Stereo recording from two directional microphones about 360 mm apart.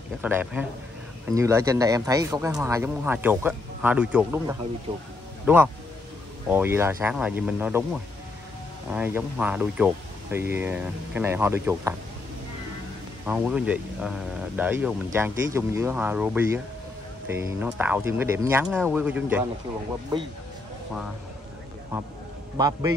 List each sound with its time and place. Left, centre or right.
0.2 s speech: centre
13.3 s speech: centre
22.6 s speech: centre